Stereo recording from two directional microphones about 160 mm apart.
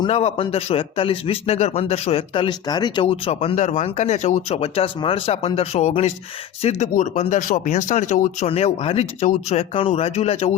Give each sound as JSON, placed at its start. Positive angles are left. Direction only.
{"t": 0.0, "sound": "a man's voice", "side_deg": 40}
{"t": 3.5, "sound": "a man's voice", "side_deg": 45}